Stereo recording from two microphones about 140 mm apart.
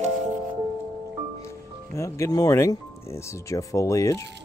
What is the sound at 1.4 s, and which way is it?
Speech, 20° left (ahead or behind).